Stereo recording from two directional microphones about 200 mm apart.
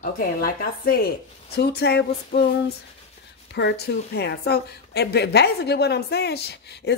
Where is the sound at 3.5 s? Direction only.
55° left (ahead or behind).